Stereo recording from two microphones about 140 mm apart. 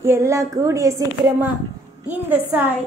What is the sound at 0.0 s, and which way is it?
A woman's voice, 20° right (ahead or behind).